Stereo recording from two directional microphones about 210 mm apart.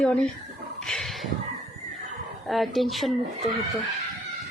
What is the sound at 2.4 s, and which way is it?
Speech, centre (ahead or behind).